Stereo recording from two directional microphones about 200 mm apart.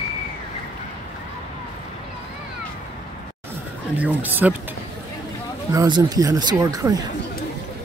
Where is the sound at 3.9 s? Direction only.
10° right (ahead or behind).